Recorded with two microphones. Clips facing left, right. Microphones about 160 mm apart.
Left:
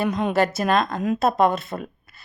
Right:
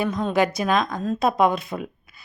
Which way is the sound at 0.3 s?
Centre (ahead or behind).